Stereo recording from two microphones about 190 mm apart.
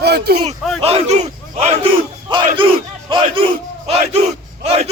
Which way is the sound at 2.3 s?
25° right (ahead or behind).